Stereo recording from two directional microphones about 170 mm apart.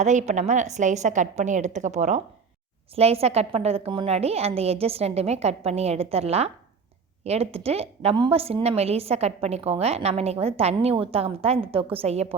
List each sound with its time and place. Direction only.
0.0 s a woman's voice: 45° right (ahead or behind)